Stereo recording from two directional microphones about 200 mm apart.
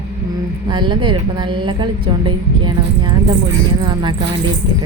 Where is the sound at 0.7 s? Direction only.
25° right (ahead or behind).